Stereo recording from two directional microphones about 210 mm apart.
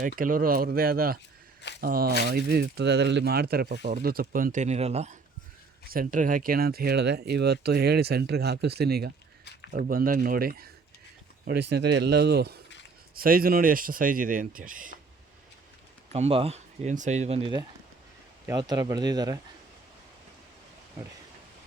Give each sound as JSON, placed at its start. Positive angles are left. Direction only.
{"t": 0.0, "sound": "speech", "side_deg": -40}
{"t": 16.1, "sound": "speech", "side_deg": -30}